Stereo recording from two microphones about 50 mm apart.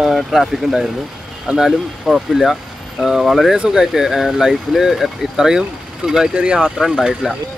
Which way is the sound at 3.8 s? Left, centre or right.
Centre.